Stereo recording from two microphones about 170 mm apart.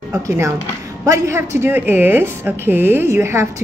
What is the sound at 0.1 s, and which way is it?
A woman's voice, 15° right (ahead or behind).